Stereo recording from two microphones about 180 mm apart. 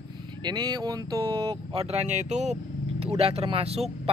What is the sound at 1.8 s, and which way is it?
Speech, 35° right (ahead or behind).